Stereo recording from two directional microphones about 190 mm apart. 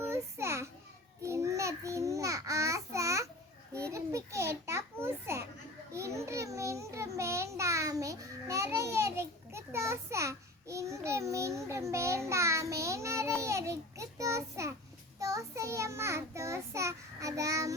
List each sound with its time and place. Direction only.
0.0 s children playing: 15° right (ahead or behind)
1.2 s babbling: 15° right (ahead or behind)
3.8 s a sound: 15° right (ahead or behind)
5.9 s children playing: 15° right (ahead or behind)
7.2 s a sound: 15° right (ahead or behind)
15.2 s child singing: 15° right (ahead or behind)